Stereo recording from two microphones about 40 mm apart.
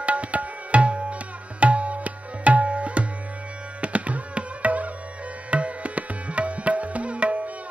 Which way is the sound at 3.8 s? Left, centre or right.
Right.